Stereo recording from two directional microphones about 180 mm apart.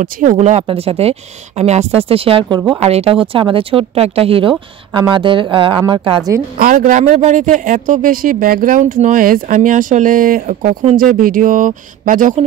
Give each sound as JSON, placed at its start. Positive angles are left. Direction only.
{"t": 0.0, "sound": "speech", "side_deg": -45}
{"t": 6.6, "sound": "speech", "side_deg": -45}